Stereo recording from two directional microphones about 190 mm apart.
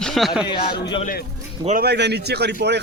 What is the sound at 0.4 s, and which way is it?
Speech, 25° left (ahead or behind).